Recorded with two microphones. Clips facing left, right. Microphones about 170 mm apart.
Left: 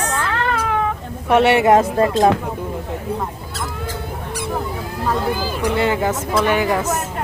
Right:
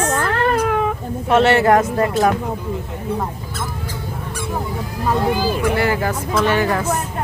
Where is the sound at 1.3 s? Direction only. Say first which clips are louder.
Left 1 dB; 15° left (ahead or behind).